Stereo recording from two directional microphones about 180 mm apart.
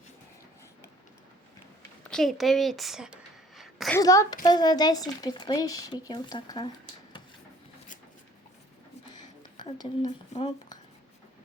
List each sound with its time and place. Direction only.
2.0 s a sound: centre (ahead or behind)
3.9 s speech: 20° left (ahead or behind)
9.6 s speech: 20° left (ahead or behind)